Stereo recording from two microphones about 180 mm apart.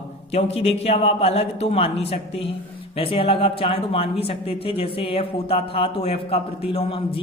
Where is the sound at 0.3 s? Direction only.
35° left (ahead or behind).